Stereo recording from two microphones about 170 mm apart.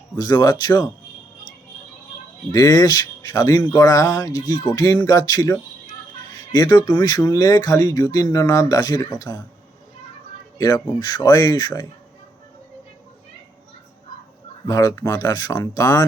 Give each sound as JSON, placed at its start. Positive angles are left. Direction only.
{"t": 0.2, "sound": "speech", "side_deg": 20}
{"t": 2.5, "sound": "speech", "side_deg": 20}
{"t": 10.6, "sound": "speech", "side_deg": 25}
{"t": 14.7, "sound": "speech", "side_deg": 20}